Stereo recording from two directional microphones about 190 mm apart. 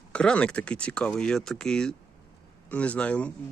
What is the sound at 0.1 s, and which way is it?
A man's voice, 5° left (ahead or behind).